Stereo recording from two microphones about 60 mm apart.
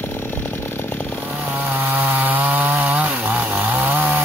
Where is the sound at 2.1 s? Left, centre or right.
Right.